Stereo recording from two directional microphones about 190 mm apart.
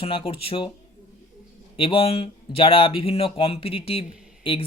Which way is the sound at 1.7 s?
30° left (ahead or behind).